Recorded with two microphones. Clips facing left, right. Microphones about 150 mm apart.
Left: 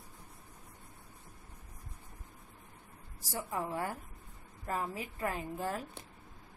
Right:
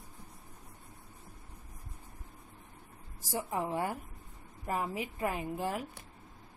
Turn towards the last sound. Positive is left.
turn(degrees=-15)  # may be behind; listen again after turning